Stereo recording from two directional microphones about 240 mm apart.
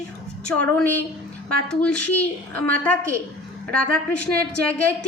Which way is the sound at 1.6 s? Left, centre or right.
Centre.